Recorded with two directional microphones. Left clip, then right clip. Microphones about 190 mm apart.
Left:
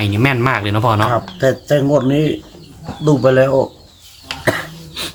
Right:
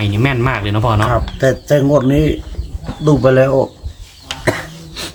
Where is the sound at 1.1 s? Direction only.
5° right (ahead or behind).